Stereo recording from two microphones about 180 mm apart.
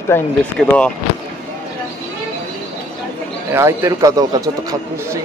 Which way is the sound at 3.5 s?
15° right (ahead or behind).